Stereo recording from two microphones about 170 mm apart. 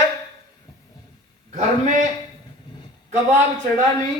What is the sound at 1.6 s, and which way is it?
Speech, 45° right (ahead or behind).